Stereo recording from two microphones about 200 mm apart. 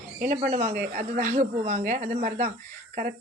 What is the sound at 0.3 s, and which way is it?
A woman's voice, 35° right (ahead or behind).